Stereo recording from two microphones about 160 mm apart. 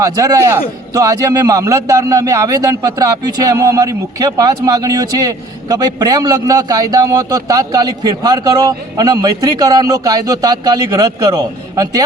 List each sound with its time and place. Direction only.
0.0 s a man's voice: 20° right (ahead or behind)